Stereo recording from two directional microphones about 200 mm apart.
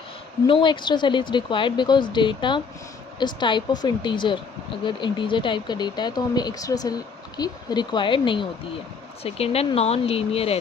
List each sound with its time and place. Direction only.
0.4 s speech: 25° left (ahead or behind)